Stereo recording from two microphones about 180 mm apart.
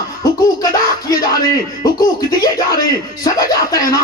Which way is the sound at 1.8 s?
20° left (ahead or behind).